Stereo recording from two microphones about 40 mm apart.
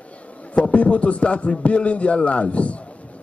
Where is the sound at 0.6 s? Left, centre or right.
Left.